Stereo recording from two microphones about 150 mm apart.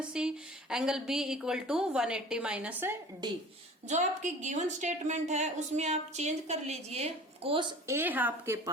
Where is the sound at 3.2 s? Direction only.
30° right (ahead or behind).